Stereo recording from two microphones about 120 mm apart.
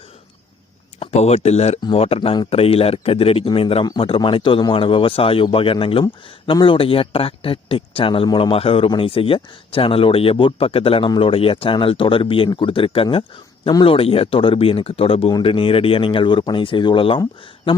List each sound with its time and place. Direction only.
0.9 s speech: 65° left (ahead or behind)
1.8 s speech: 50° left (ahead or behind)